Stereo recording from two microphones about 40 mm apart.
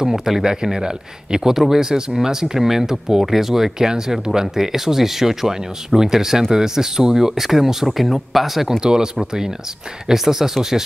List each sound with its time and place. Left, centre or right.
0.0 s speech: centre
8.6 s speech: centre